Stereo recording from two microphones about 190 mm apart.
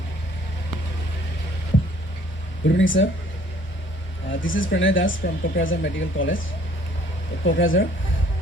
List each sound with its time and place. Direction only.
2.6 s speech: 80° left
4.4 s speech: 90° left
7.4 s speech: 90° left